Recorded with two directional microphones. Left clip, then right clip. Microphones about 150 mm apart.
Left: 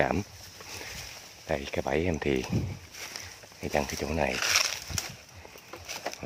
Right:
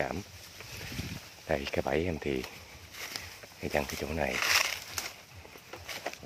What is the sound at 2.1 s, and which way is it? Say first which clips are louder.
Speech: left 5 dB; 25° left (ahead or behind).